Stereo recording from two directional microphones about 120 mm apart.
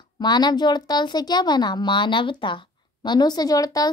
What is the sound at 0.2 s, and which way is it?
Speech, 35° left (ahead or behind).